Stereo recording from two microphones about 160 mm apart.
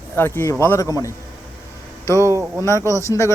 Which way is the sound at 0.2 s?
15° left (ahead or behind).